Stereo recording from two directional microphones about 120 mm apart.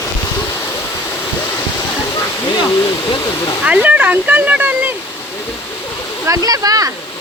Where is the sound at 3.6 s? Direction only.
10° right (ahead or behind).